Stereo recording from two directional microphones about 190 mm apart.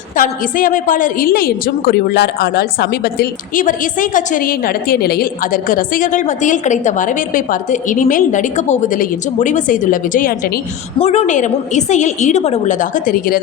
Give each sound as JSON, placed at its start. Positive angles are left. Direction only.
{"t": 0.2, "sound": "a woman's voice", "side_deg": 45}
{"t": 10.9, "sound": "a woman's voice", "side_deg": 30}